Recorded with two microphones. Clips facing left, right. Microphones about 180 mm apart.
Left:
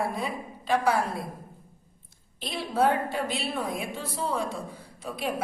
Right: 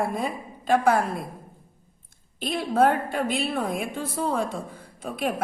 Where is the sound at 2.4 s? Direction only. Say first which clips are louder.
Right 4 dB; 50° right (ahead or behind).